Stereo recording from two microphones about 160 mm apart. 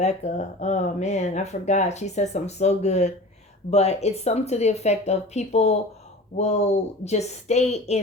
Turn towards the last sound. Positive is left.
turn(degrees=45)  # may be behind; listen again after turning